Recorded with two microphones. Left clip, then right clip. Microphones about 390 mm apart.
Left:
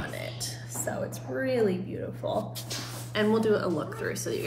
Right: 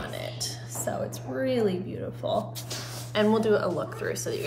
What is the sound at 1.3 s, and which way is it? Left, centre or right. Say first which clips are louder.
Speech: right 1 dB; centre.